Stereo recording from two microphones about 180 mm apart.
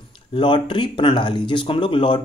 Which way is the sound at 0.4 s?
25° left (ahead or behind).